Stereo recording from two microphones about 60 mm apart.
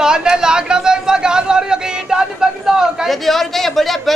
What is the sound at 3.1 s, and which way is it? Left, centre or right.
Speech, centre.